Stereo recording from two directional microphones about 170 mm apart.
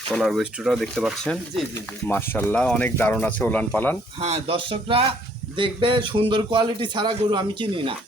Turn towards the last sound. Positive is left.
turn(degrees=-30)  # may be behind; listen again after turning